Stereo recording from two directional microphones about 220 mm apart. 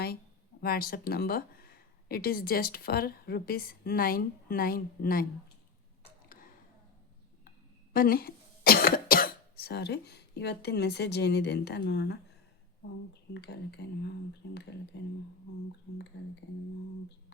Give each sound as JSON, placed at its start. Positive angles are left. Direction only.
{"t": 0.6, "sound": "speech", "side_deg": 45}
{"t": 7.9, "sound": "speech", "side_deg": 40}
{"t": 13.3, "sound": "speech", "side_deg": 50}